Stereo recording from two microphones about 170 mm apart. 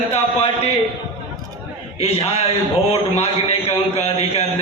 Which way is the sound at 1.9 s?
35° left (ahead or behind).